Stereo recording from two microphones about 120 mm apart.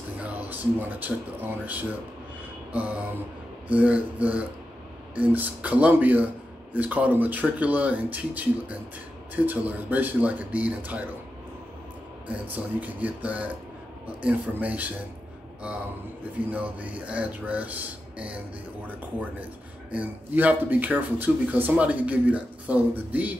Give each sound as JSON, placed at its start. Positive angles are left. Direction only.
{"t": 0.5, "sound": "speech", "side_deg": -15}
{"t": 3.6, "sound": "speech", "side_deg": -10}
{"t": 12.3, "sound": "speech", "side_deg": -15}
{"t": 16.3, "sound": "speech", "side_deg": -10}